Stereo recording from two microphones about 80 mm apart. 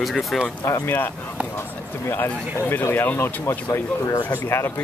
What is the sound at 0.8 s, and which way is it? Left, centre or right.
Speech, left.